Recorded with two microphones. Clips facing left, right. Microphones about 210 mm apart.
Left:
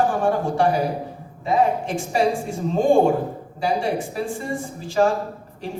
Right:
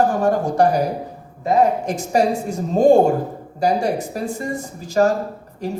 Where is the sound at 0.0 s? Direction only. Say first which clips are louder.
Right 3 dB; 40° right (ahead or behind).